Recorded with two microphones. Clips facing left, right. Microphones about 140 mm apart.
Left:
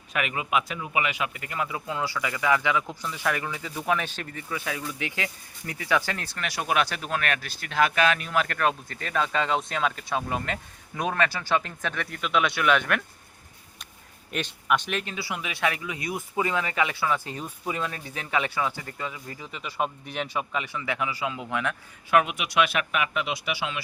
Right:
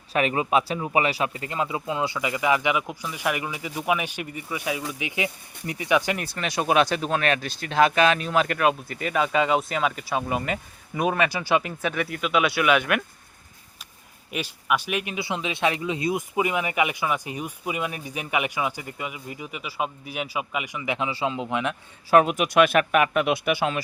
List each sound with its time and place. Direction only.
0.1 s speech: 35° right (ahead or behind)
8.5 s speech: 10° right (ahead or behind)
14.3 s speech: 5° right (ahead or behind)
22.1 s a man's voice: 40° right (ahead or behind)